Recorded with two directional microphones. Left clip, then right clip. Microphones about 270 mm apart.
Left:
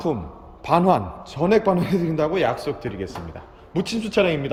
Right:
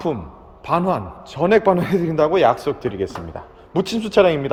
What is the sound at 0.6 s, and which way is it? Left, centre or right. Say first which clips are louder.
A man's voice: left 2 dB; centre.